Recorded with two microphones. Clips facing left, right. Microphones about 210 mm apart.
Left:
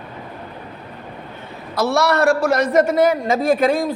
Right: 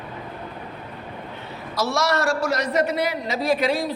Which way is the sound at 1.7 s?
60° left (ahead or behind).